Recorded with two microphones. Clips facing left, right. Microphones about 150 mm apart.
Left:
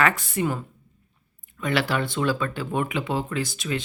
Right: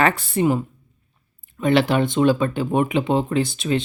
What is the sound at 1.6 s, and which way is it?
Speech, 25° right (ahead or behind).